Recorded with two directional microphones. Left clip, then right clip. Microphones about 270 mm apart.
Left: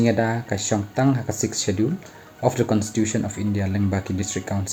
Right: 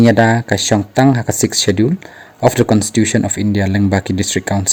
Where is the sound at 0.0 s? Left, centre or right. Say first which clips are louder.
Right 10 dB; right.